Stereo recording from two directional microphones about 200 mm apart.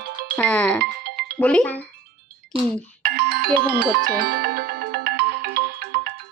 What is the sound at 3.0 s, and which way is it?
Music, 50° right (ahead or behind).